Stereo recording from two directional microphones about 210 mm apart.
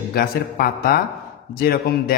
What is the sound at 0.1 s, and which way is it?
A man's voice, 45° left (ahead or behind).